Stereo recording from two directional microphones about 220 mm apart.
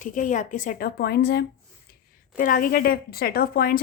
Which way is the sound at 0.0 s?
35° left (ahead or behind).